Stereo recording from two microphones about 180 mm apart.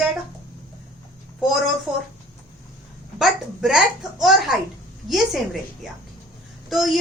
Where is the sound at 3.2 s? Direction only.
Centre (ahead or behind).